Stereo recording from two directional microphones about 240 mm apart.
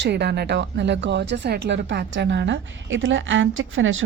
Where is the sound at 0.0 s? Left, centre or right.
Right.